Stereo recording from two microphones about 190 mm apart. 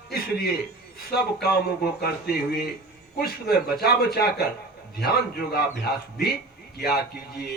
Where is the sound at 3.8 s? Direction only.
55° left (ahead or behind).